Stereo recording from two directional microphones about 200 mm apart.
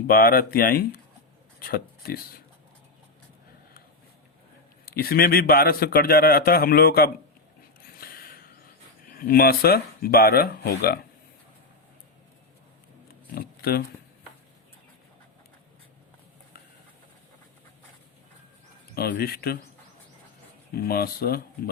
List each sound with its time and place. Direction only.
0.1 s a man's voice: 45° left (ahead or behind)
4.9 s a man's voice: 50° left (ahead or behind)
8.0 s a sound: 45° left (ahead or behind)
9.0 s a man's voice: 45° left (ahead or behind)
13.3 s speech: 50° left (ahead or behind)
18.9 s a man's voice: 50° left (ahead or behind)
20.7 s a man's voice: 50° left (ahead or behind)